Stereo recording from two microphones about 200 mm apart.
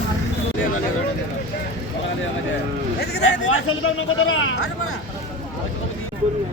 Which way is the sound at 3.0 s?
60° left (ahead or behind).